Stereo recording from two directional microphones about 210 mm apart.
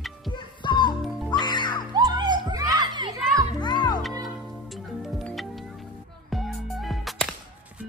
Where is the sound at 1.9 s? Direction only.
20° right (ahead or behind).